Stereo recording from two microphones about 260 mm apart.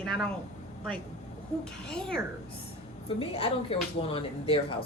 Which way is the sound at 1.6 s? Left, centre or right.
Centre.